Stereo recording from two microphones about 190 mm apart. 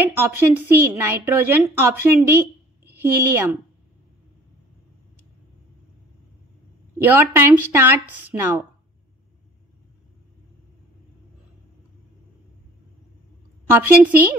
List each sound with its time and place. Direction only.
0.2 s a woman's voice: 10° right (ahead or behind)
7.0 s a woman's voice: 10° right (ahead or behind)
13.7 s a woman's voice: 10° right (ahead or behind)